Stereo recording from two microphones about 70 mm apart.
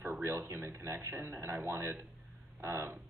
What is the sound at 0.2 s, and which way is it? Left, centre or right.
Speech, right.